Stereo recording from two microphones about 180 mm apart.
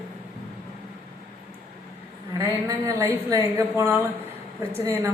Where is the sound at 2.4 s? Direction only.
15° right (ahead or behind).